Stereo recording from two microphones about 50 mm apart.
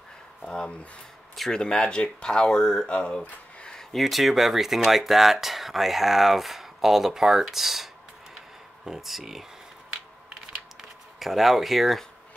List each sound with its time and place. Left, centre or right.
0.4 s speech: centre
3.9 s speech: centre
10.8 s speech: centre